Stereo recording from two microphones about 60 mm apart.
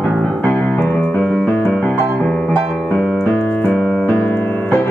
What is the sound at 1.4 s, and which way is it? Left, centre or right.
Piano, centre.